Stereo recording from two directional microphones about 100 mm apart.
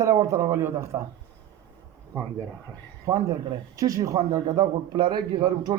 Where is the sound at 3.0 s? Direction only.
35° right (ahead or behind).